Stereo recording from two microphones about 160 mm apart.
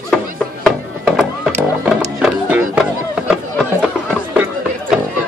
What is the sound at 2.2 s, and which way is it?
Music, 10° right (ahead or behind).